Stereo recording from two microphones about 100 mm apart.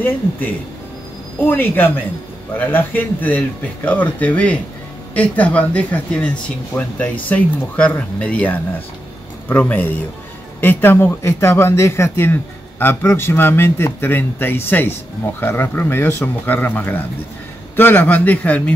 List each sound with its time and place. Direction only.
1.4 s speech: 20° left (ahead or behind)